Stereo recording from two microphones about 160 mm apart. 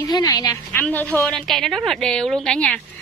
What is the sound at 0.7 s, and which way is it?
A woman's voice, 10° left (ahead or behind).